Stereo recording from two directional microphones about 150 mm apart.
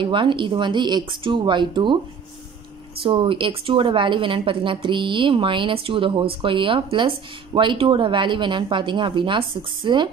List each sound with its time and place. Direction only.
0.0 s speech: 35° right (ahead or behind)
3.0 s speech: 35° right (ahead or behind)